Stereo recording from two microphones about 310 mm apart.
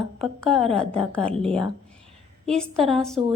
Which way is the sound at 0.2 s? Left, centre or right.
Centre.